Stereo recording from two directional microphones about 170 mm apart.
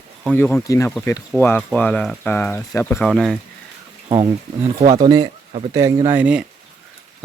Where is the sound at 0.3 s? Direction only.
5° left (ahead or behind).